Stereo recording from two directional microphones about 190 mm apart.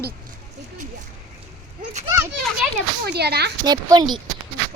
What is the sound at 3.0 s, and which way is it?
Speech, 60° right (ahead or behind).